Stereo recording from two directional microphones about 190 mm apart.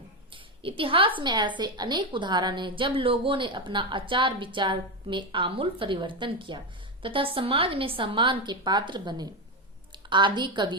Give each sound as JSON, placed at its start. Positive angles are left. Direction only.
{"t": 0.6, "sound": "a woman's voice", "side_deg": -30}